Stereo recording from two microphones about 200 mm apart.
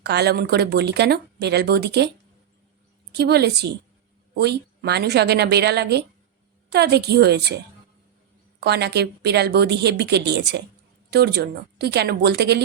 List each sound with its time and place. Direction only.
0.0 s speech: 55° right (ahead or behind)
3.1 s speech: 55° right (ahead or behind)
8.6 s speech: 55° right (ahead or behind)